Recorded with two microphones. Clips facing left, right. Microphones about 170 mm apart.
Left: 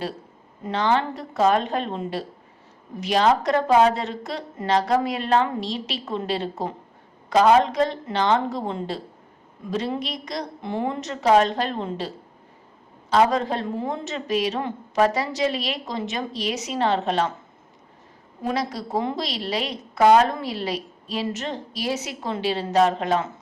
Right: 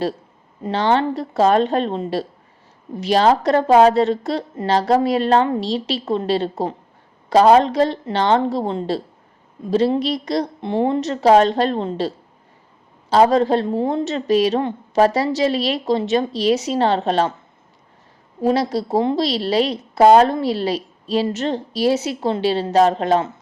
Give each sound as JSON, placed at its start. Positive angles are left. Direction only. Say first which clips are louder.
{"t": 0.6, "sound": "a woman's voice", "louder": "right 4 dB", "side_deg": -30}
{"t": 18.4, "sound": "a woman's voice", "louder": "right 8 dB", "side_deg": -30}